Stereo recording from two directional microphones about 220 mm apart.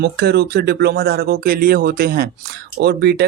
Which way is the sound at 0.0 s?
45° right (ahead or behind).